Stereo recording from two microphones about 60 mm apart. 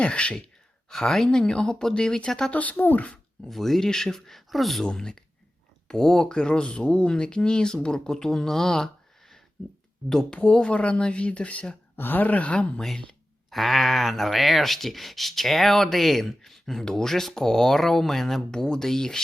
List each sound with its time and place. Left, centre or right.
0.0 s speech: centre
0.9 s speech: centre
2.5 s speech: left
3.4 s speech: centre
4.9 s speech: centre
11.9 s speech: left
13.5 s speech: centre